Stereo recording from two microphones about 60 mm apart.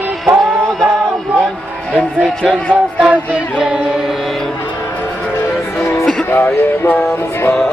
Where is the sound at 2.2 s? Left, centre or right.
Centre.